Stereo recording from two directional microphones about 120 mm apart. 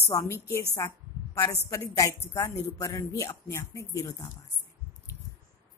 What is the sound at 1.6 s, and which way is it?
Speech, 30° left (ahead or behind).